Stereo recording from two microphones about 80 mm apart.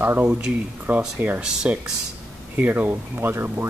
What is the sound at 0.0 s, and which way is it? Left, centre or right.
Speech, centre.